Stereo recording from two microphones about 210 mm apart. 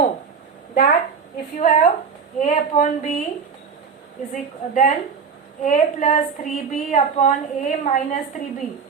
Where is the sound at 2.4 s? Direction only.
35° left (ahead or behind).